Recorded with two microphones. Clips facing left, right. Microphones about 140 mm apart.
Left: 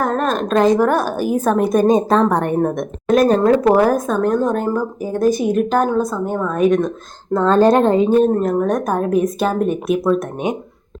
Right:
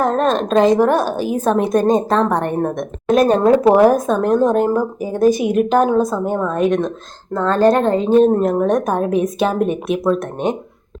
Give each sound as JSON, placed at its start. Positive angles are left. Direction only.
{"t": 0.2, "sound": "a woman's voice", "side_deg": 5}
{"t": 7.3, "sound": "a woman's voice", "side_deg": 20}
{"t": 8.3, "sound": "a woman's voice", "side_deg": -5}